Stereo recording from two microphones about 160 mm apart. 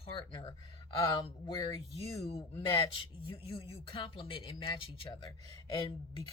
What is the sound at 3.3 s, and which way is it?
Speech, 35° left (ahead or behind).